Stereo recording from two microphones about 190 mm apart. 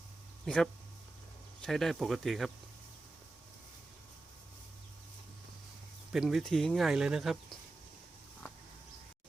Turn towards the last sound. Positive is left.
turn(degrees=0)  # may be behind; listen again after turning